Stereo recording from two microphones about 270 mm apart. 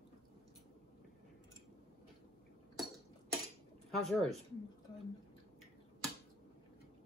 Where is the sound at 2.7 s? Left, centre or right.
Centre.